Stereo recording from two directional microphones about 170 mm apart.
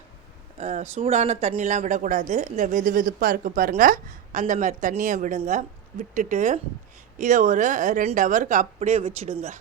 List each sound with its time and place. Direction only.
0.6 s speech: 40° right (ahead or behind)